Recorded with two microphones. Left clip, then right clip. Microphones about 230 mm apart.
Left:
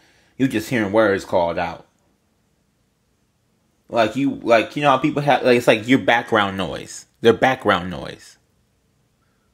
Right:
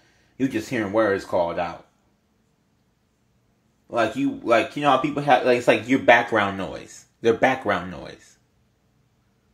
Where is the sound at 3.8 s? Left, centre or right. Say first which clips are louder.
Left 4 dB; left.